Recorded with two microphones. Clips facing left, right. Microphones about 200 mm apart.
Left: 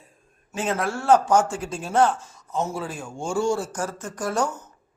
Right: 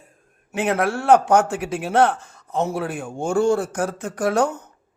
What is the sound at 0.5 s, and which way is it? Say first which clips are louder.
Speech: right 5 dB; 60° right (ahead or behind).